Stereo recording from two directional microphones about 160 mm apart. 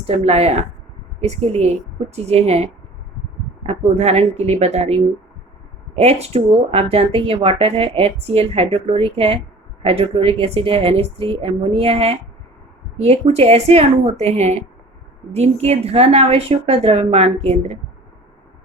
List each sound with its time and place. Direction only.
0.0 s speech: 40° right (ahead or behind)
3.7 s speech: 40° right (ahead or behind)
6.0 s speech: 40° right (ahead or behind)